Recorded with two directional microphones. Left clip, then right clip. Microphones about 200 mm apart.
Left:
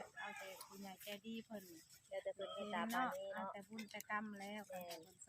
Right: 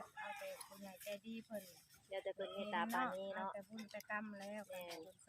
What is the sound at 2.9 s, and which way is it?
Speech, centre (ahead or behind).